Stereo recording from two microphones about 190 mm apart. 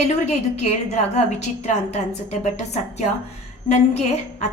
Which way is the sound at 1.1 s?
35° left (ahead or behind).